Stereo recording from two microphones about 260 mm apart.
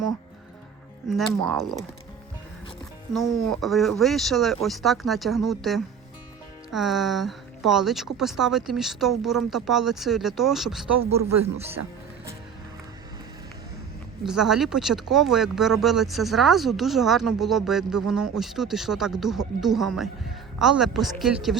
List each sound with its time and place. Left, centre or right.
1.5 s speech: centre
3.1 s speech: centre
11.2 s speech: right
14.3 s speech: centre